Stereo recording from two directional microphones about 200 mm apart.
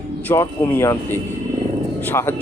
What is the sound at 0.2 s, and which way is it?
Speech, 10° left (ahead or behind).